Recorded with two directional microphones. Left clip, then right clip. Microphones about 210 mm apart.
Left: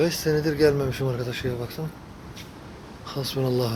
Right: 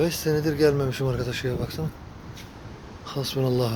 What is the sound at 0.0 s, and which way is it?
Speech, 10° right (ahead or behind).